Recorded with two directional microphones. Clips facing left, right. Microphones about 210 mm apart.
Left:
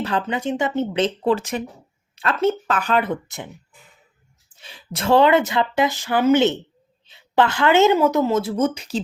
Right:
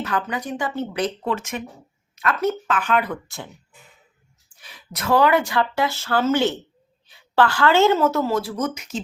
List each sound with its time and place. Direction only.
0.0 s speech: 30° left (ahead or behind)
3.0 s speech: 20° left (ahead or behind)